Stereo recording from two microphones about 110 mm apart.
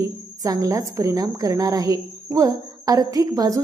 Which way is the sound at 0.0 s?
30° right (ahead or behind).